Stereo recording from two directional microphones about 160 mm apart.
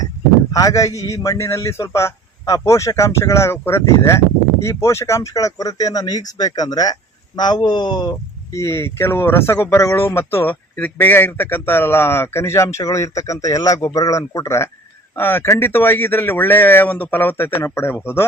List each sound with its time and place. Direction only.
0.5 s speech: 20° left (ahead or behind)
8.5 s speech: 15° left (ahead or behind)